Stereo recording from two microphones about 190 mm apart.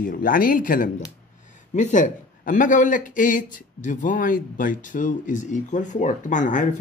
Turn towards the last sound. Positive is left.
turn(degrees=40)  # may be behind; listen again after turning